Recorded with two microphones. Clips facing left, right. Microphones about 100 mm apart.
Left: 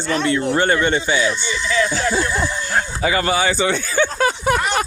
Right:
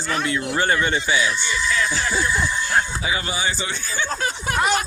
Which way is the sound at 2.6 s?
55° left (ahead or behind).